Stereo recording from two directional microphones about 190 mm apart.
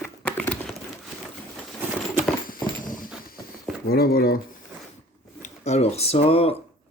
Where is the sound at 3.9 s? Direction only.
55° left (ahead or behind).